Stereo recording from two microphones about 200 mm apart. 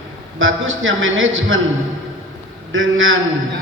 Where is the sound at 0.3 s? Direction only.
80° right.